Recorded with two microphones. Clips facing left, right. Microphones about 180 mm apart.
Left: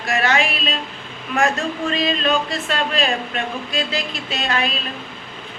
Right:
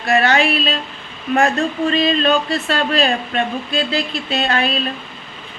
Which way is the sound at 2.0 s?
35° right (ahead or behind).